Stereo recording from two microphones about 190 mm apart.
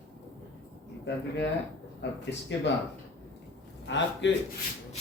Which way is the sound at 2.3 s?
70° left (ahead or behind).